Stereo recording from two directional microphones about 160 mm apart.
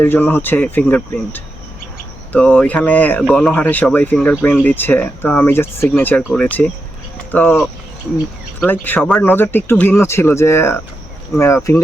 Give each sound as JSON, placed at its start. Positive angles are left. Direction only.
{"t": 0.0, "sound": "speech", "side_deg": 10}